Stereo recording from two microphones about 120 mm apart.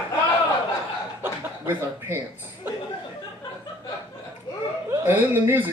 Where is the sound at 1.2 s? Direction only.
20° right (ahead or behind).